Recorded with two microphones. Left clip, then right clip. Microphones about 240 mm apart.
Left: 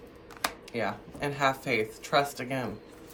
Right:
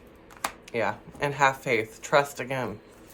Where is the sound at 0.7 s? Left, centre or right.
Right.